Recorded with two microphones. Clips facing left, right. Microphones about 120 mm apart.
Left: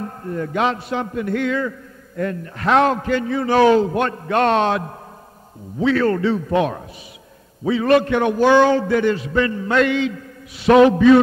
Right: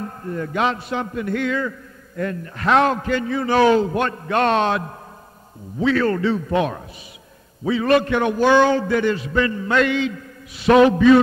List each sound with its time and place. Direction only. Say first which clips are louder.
0.0 s a man's voice: left 1 dB; 35° left (ahead or behind)